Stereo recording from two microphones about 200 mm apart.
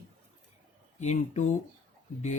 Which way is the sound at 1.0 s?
35° left (ahead or behind).